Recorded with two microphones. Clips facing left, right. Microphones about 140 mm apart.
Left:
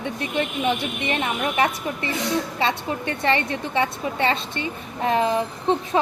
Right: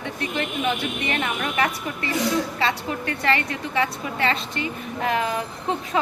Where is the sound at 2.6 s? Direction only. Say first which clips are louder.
Left 1 dB; 25° left (ahead or behind).